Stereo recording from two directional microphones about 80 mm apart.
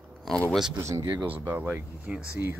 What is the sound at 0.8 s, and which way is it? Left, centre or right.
Speech, right.